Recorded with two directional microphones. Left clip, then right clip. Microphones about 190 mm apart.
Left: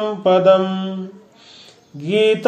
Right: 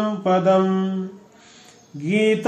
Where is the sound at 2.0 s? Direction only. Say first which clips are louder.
Left 5 dB; 30° left (ahead or behind).